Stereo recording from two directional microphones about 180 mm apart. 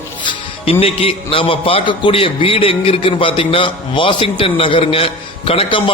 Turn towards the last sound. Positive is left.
turn(degrees=30)  # may be behind; listen again after turning